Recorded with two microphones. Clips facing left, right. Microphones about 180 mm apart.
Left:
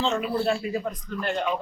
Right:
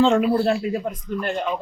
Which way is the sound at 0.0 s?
50° right (ahead or behind).